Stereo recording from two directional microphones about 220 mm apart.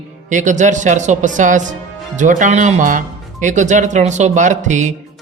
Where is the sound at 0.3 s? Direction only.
35° right (ahead or behind).